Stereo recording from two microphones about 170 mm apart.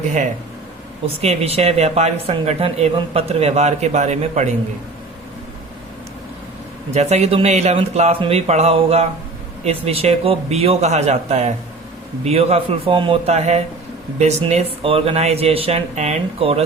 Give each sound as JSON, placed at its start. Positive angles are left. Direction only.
{"t": 1.0, "sound": "speech", "side_deg": -40}
{"t": 6.9, "sound": "speech", "side_deg": -40}